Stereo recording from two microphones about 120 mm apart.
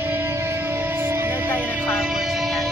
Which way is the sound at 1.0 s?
20° right (ahead or behind).